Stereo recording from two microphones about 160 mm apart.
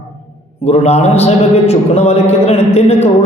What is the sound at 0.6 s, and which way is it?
Speech, 40° left (ahead or behind).